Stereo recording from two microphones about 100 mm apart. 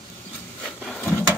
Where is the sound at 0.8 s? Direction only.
10° left (ahead or behind).